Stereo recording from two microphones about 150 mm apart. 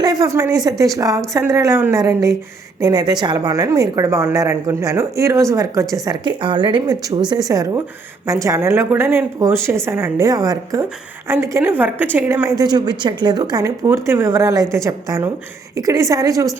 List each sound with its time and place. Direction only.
0.0 s a woman's voice: 25° right (ahead or behind)
11.5 s a woman's voice: 15° right (ahead or behind)